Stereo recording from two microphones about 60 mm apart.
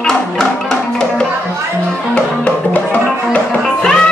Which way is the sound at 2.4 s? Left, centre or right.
Left.